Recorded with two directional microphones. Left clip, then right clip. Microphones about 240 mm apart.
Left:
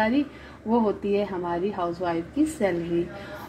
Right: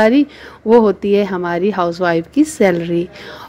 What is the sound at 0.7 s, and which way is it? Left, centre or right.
A woman's voice, right.